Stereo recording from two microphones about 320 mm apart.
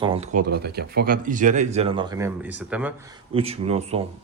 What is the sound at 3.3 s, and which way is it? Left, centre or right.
Speech, centre.